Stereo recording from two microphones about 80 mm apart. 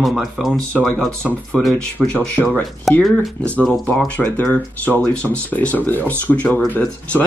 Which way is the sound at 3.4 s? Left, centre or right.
Centre.